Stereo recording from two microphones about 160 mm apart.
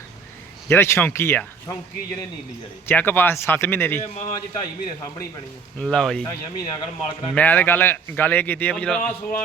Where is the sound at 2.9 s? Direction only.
15° left (ahead or behind).